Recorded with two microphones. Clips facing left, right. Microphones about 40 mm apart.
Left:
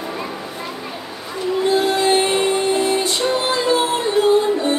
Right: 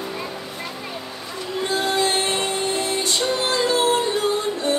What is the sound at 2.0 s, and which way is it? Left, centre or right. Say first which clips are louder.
Music: left 6 dB; centre.